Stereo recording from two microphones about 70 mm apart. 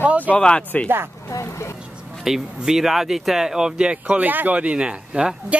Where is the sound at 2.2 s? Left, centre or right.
Centre.